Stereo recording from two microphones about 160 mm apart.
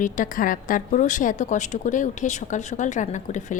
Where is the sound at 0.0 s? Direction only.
55° left (ahead or behind).